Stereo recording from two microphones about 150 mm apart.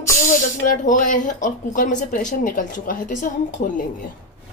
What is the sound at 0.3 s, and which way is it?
A woman's voice, 60° left (ahead or behind).